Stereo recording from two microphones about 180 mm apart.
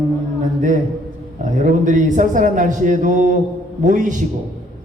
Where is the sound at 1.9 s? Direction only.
45° right (ahead or behind).